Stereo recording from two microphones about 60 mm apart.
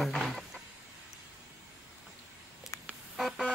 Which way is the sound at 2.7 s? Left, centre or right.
Left.